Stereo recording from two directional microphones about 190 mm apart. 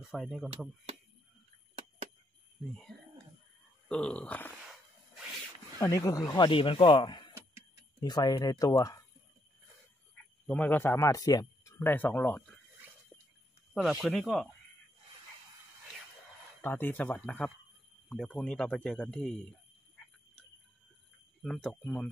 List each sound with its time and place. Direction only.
0.0 s speech: centre (ahead or behind)
3.9 s speech: 5° left (ahead or behind)
5.8 s speech: 20° left (ahead or behind)
10.4 s speech: 5° left (ahead or behind)
13.7 s speech: centre (ahead or behind)
16.6 s speech: 10° left (ahead or behind)
21.4 s speech: 5° left (ahead or behind)